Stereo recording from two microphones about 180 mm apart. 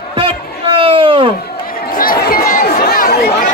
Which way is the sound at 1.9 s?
55° left (ahead or behind).